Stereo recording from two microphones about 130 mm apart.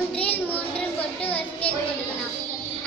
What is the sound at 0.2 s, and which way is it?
Child singing, 10° left (ahead or behind).